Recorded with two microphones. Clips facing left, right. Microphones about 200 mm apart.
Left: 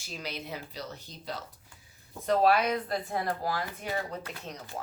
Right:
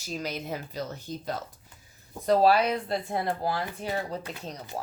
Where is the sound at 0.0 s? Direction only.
40° right (ahead or behind).